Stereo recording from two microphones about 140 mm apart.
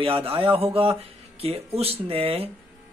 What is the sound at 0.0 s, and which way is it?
Speech, 40° right (ahead or behind).